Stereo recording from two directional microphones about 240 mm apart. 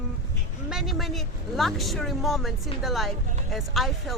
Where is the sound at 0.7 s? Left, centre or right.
Centre.